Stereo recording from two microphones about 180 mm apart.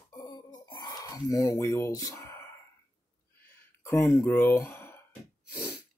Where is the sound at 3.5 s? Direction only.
15° left (ahead or behind).